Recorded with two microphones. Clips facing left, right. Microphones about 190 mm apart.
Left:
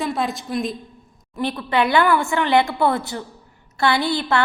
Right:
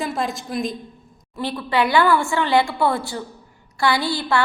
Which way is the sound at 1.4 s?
20° left (ahead or behind).